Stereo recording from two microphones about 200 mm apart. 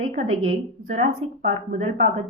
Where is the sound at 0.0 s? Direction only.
35° right (ahead or behind).